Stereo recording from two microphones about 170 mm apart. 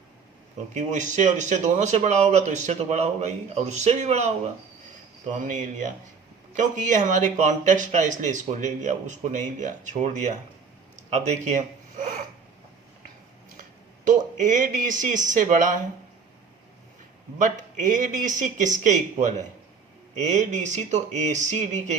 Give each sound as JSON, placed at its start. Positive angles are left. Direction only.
{"t": 0.7, "sound": "speech", "side_deg": -45}
{"t": 5.3, "sound": "speech", "side_deg": -50}
{"t": 13.6, "sound": "speech", "side_deg": -50}
{"t": 17.3, "sound": "speech", "side_deg": -50}